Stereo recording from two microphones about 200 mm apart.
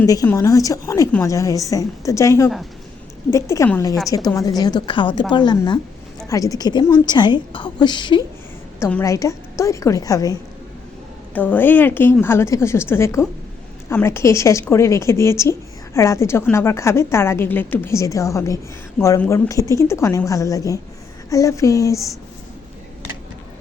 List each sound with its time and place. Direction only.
0.0 s a woman's voice: 15° left (ahead or behind)
8.8 s a woman's voice: 10° left (ahead or behind)
11.3 s a woman's voice: 10° left (ahead or behind)